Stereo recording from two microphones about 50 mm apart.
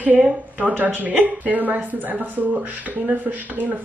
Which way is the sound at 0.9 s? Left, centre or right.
Right.